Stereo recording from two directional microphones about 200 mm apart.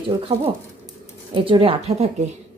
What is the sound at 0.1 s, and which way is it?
A woman's voice, 25° right (ahead or behind).